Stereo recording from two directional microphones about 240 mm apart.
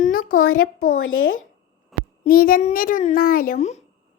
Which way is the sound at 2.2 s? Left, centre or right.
Left.